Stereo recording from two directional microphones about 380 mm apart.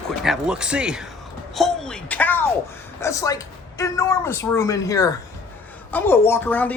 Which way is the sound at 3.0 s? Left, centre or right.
Centre.